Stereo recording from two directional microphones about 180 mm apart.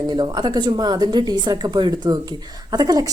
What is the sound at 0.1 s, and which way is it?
Speech, 25° right (ahead or behind).